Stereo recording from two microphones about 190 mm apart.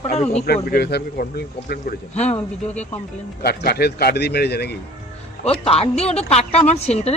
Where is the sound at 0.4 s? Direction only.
55° left (ahead or behind).